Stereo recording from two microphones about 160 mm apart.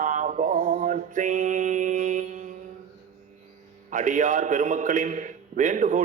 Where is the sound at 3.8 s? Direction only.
50° right (ahead or behind).